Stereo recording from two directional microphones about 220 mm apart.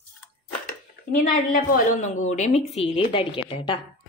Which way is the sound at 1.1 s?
40° left (ahead or behind).